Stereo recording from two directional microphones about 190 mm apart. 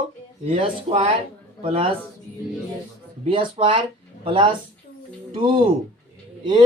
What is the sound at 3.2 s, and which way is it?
Speech, 30° right (ahead or behind).